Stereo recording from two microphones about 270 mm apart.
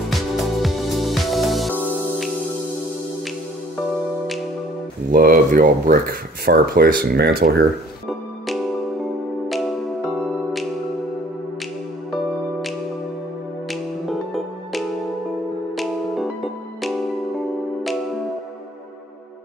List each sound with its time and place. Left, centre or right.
0.1 s music: centre
5.1 s speech: right
9.5 s music: centre
13.7 s music: centre